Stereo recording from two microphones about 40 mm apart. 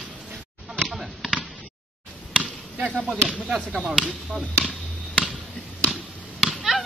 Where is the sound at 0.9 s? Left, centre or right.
Centre.